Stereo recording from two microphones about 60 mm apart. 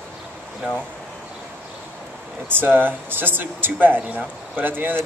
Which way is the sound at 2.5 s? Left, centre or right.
Right.